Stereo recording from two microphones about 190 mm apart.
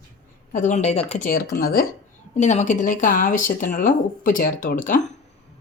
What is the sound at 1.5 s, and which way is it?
Speech, 50° left (ahead or behind).